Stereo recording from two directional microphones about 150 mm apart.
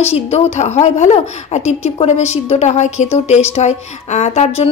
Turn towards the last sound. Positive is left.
turn(degrees=50)  # may be behind; listen again after turning